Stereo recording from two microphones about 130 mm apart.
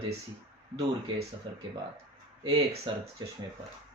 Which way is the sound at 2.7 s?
50° right (ahead or behind).